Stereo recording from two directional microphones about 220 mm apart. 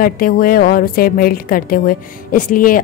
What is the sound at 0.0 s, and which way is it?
A woman's voice, 40° left (ahead or behind).